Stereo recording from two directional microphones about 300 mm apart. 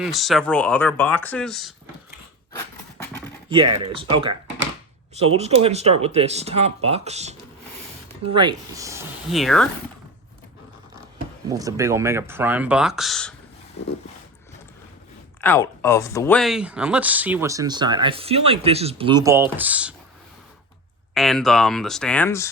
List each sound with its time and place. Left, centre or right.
0.0 s speech: centre
3.0 s pant: centre
3.8 s speech: centre
8.4 s speech: centre
11.4 s speech: centre
13.8 s dog: left
15.4 s speech: centre
21.1 s speech: centre